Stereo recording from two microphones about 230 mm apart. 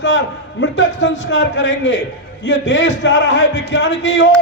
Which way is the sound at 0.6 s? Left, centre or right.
Left.